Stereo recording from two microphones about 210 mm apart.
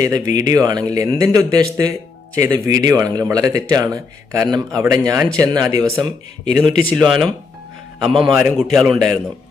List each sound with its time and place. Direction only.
0.0 s speech: 15° right (ahead or behind)
6.5 s a man's voice: centre (ahead or behind)